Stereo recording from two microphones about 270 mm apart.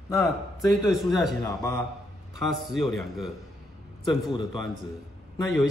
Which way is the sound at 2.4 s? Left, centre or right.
Centre.